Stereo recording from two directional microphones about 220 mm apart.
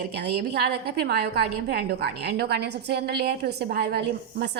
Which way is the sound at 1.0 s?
45° right (ahead or behind).